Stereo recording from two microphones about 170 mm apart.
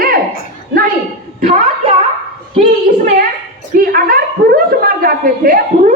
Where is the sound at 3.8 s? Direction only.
60° right (ahead or behind).